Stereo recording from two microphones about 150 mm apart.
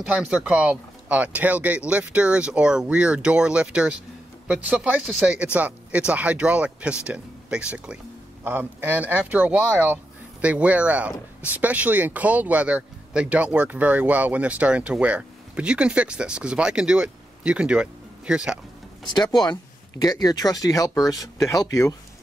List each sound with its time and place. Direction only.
0.0 s speech: 5° right (ahead or behind)
19.1 s speech: 25° left (ahead or behind)